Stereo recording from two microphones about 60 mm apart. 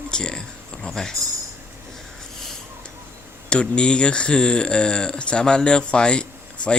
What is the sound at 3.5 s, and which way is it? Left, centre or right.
Speech, centre.